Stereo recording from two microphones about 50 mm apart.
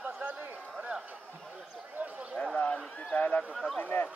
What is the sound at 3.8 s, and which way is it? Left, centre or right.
Speech, left.